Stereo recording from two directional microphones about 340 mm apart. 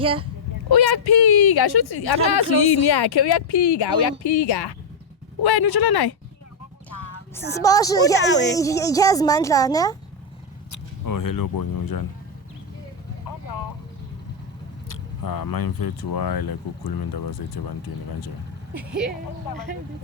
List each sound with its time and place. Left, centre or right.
0.0 s speech: centre
0.7 s speech: left
5.4 s speech: left
7.5 s speech: centre
8.3 s speech: left
8.5 s speech: centre
10.7 s speech: left
14.8 s speech: left
18.8 s speech: centre